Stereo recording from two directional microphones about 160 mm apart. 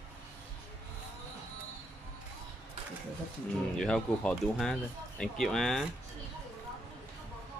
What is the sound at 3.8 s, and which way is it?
Speech, 5° left (ahead or behind).